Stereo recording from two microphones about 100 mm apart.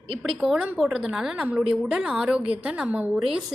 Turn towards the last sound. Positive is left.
turn(degrees=-5)  # may be behind; listen again after turning